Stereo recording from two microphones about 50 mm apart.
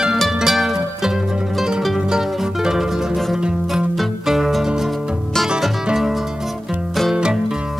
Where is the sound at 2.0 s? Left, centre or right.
Centre.